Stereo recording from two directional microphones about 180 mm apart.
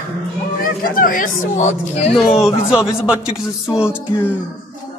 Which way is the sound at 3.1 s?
5° right (ahead or behind).